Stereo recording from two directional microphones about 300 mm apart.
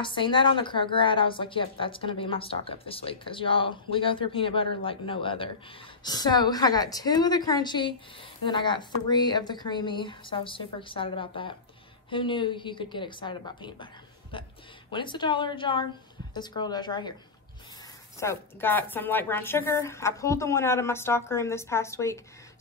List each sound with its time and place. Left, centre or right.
0.0 s a woman's voice: centre
18.2 s a woman's voice: centre